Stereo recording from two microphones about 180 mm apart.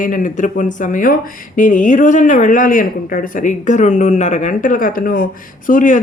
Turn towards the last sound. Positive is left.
turn(degrees=45)  # may be behind; listen again after turning